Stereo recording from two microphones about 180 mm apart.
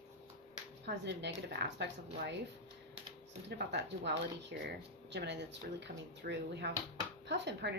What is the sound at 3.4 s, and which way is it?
A woman's voice, 70° right (ahead or behind).